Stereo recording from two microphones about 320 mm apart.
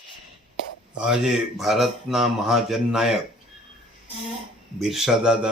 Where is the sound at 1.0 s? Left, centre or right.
Centre.